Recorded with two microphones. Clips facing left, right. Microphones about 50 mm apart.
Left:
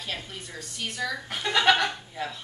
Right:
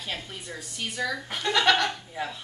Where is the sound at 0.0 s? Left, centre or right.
Centre.